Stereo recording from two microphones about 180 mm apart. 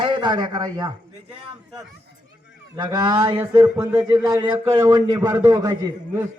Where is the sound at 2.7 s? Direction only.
25° right (ahead or behind).